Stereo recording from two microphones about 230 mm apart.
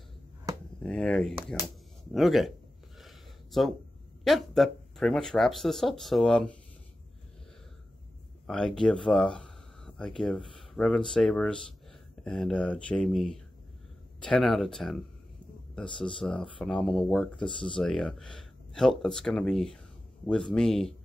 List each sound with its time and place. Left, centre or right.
0.8 s speech: centre
3.0 s a sound: centre
4.2 s speech: centre
8.5 s speech: centre